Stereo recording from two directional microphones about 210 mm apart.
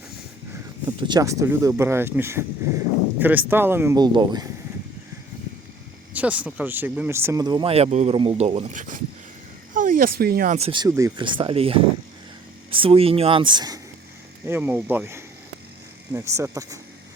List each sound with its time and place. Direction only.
0.9 s speech: 20° right (ahead or behind)
6.1 s speech: 5° right (ahead or behind); by 10.8 s 25° right (ahead or behind)
10.8 s speech: 15° right (ahead or behind)
14.4 s speech: 10° right (ahead or behind)